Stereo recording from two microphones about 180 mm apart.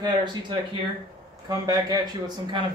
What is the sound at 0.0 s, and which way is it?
Speech, 25° right (ahead or behind).